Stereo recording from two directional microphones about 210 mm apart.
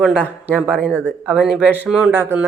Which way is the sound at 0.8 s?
5° left (ahead or behind).